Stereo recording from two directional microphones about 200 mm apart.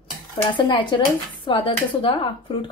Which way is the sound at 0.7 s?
25° left (ahead or behind).